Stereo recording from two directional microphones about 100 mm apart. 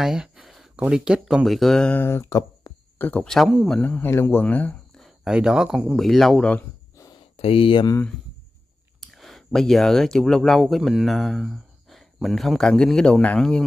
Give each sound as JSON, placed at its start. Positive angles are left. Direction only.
{"t": 0.0, "sound": "a sound", "side_deg": -5}
{"t": 0.7, "sound": "speech", "side_deg": -10}
{"t": 1.9, "sound": "speech", "side_deg": 20}
{"t": 2.6, "sound": "a sound", "side_deg": 40}
{"t": 3.0, "sound": "speech", "side_deg": 15}
{"t": 3.3, "sound": "speech", "side_deg": 0}
{"t": 3.8, "sound": "speech", "side_deg": 20}
{"t": 4.9, "sound": "a sound", "side_deg": 0}
{"t": 5.3, "sound": "speech", "side_deg": -5}
{"t": 7.3, "sound": "speech", "side_deg": 70}
{"t": 9.0, "sound": "speech", "side_deg": 0}